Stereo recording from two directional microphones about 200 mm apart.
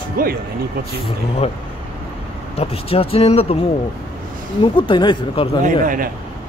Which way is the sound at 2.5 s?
30° left (ahead or behind).